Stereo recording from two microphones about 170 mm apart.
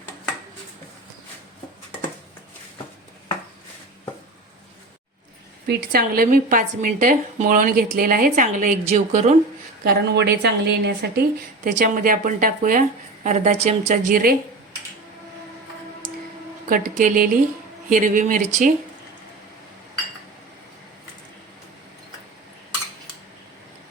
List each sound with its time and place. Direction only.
5.6 s a woman's voice: 60° right (ahead or behind)
8.9 s speech: 40° right (ahead or behind)
9.8 s speech: 75° right (ahead or behind)
11.8 s speech: 55° right (ahead or behind)
13.2 s a woman's voice: 45° right (ahead or behind)
16.6 s a woman's voice: 55° right (ahead or behind)